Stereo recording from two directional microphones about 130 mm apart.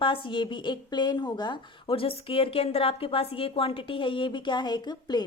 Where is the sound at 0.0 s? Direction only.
40° left (ahead or behind).